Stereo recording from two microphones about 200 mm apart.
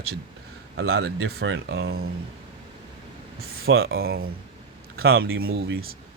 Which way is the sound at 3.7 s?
50° right (ahead or behind).